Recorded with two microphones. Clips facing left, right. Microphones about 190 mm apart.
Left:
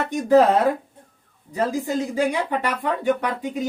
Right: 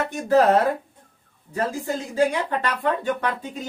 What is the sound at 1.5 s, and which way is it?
Speech, 15° left (ahead or behind).